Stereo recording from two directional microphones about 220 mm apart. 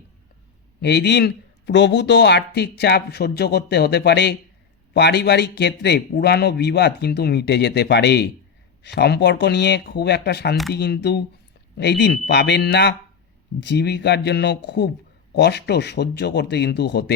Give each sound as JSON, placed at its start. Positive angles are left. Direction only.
{"t": 0.8, "sound": "speech", "side_deg": 50}